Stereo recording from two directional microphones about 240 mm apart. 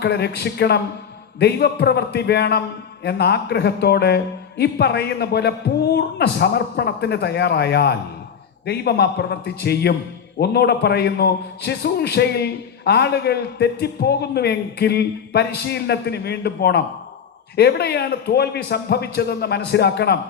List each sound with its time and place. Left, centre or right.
0.0 s a man's voice: left